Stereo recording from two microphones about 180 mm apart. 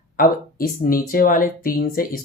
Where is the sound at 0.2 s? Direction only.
55° left (ahead or behind).